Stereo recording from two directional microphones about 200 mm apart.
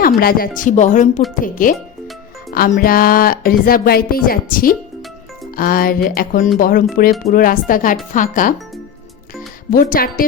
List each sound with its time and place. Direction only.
0.2 s speech: 50° left (ahead or behind)
1.6 s music: 40° left (ahead or behind)
8.1 s speech: 40° left (ahead or behind)
9.7 s music: 45° left (ahead or behind)